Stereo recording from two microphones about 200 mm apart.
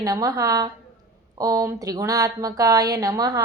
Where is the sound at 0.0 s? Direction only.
20° right (ahead or behind).